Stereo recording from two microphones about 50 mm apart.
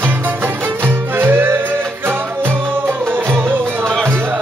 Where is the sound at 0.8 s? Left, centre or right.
Right.